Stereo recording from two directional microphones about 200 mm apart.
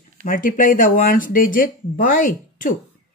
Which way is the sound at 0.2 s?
45° left (ahead or behind).